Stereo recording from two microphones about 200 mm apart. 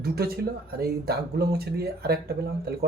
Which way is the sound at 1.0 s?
50° right (ahead or behind).